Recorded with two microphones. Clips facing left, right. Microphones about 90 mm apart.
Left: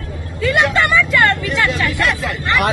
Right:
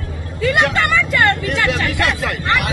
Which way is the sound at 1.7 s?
75° right (ahead or behind).